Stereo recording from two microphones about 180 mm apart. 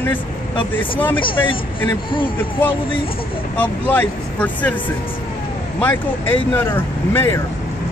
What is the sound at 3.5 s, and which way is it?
Speech, 10° left (ahead or behind).